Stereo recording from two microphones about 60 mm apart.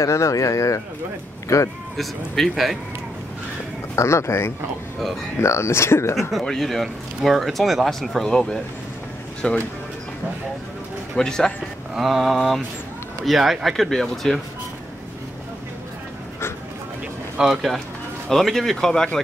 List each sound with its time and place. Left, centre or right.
0.0 s speech: left
2.0 s speech: centre
3.9 s speech: left
6.4 s speech: centre
11.1 s speech: centre
11.9 s speech: centre
17.4 s speech: centre